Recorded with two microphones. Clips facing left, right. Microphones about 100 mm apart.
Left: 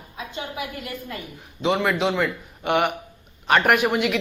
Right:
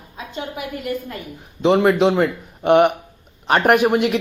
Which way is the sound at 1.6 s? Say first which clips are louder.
Right 7 dB; 35° right (ahead or behind).